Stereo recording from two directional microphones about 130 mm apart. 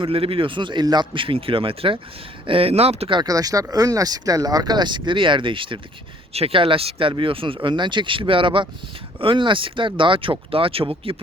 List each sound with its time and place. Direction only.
0.0 s speech: 45° right (ahead or behind)
3.2 s speech: 30° right (ahead or behind); by 11.2 s 45° right (ahead or behind)